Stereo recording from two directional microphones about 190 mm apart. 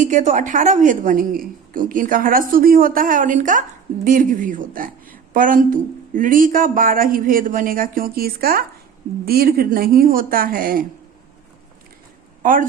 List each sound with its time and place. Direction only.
0.0 s a woman's voice: 40° right (ahead or behind)
12.4 s speech: 45° right (ahead or behind)